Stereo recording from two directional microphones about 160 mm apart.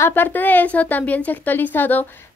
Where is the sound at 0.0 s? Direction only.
10° left (ahead or behind).